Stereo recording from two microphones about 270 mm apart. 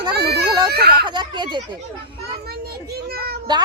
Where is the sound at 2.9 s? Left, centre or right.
Right.